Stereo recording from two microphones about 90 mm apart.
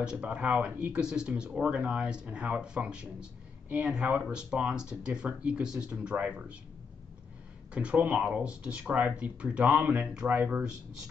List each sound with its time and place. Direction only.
0.0 s speech: 10° right (ahead or behind)
7.7 s speech: 15° right (ahead or behind)